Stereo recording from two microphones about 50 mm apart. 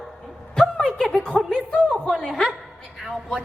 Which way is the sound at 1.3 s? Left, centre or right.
Centre.